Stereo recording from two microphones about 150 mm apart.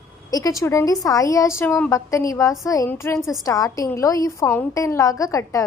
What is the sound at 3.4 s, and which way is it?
A woman's voice, 25° left (ahead or behind).